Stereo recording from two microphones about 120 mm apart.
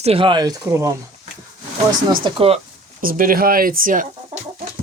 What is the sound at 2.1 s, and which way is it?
Speech, 45° right (ahead or behind).